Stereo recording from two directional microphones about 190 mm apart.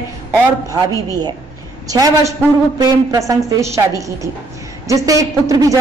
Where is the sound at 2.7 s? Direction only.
20° right (ahead or behind).